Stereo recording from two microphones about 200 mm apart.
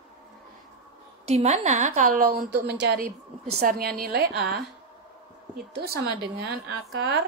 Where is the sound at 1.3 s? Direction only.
35° right (ahead or behind); by 4.6 s 50° right (ahead or behind).